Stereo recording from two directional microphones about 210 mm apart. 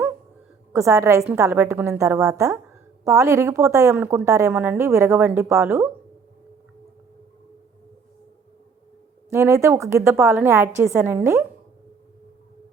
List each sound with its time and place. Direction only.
0.7 s a woman's voice: 15° right (ahead or behind)
9.3 s a woman's voice: 10° right (ahead or behind)